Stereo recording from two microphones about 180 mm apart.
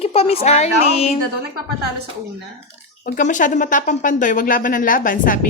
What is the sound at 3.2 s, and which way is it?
Speech, 45° left (ahead or behind).